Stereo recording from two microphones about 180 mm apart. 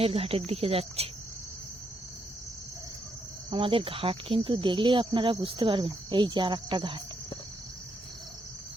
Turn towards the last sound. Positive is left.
turn(degrees=-25)  # may be behind; listen again after turning